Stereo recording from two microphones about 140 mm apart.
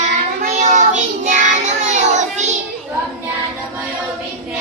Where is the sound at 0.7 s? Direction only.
60° right (ahead or behind).